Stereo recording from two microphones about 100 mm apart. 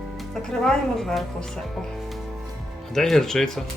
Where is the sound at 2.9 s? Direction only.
5° left (ahead or behind).